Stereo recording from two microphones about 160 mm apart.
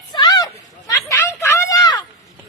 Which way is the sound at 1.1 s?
15° left (ahead or behind).